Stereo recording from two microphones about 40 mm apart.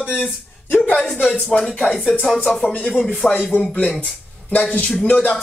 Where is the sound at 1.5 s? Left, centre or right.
Centre.